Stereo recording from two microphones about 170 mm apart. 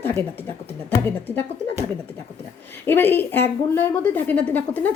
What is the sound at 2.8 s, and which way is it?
A woman's voice, 15° left (ahead or behind).